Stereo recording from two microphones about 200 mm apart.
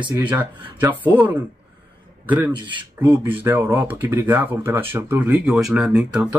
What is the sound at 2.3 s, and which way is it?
Speech, 25° right (ahead or behind).